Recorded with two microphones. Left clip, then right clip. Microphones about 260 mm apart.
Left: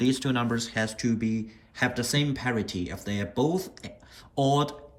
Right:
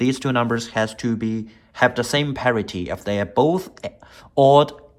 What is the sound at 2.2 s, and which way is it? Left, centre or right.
Speech, right.